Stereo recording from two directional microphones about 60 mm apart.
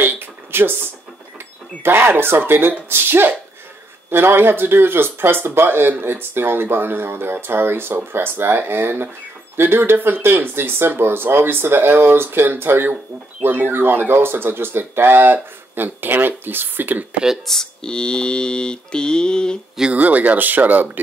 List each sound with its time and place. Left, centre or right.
0.0 s a sound: right
1.8 s speech: right
17.5 s mantra: centre
19.9 s speech: right